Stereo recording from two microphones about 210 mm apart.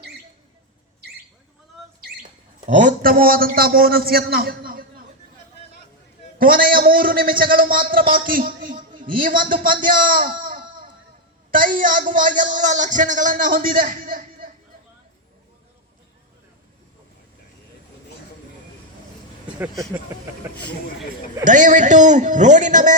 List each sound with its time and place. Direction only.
2.6 s a man's voice: 35° right (ahead or behind)
6.4 s a man's voice: 45° right (ahead or behind)
19.5 s speech: 10° right (ahead or behind)
21.4 s speech: 35° right (ahead or behind)